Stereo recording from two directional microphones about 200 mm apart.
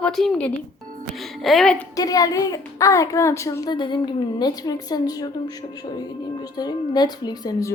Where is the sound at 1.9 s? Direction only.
20° left (ahead or behind).